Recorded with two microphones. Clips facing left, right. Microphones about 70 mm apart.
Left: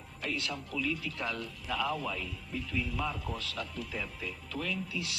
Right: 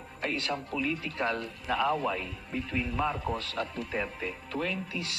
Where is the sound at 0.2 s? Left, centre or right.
Right.